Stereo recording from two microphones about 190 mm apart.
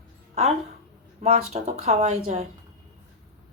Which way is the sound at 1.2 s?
35° right (ahead or behind).